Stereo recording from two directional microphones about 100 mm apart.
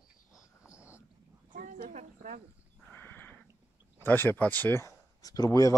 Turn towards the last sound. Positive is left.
turn(degrees=35)  # may be behind; listen again after turning